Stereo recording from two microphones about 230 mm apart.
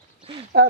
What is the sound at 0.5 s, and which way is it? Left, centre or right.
Speech, right.